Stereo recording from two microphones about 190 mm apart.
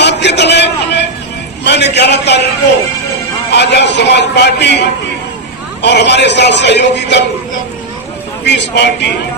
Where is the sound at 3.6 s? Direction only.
65° left (ahead or behind).